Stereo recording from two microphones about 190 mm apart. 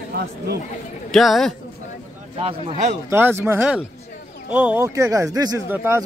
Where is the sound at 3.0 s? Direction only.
10° right (ahead or behind).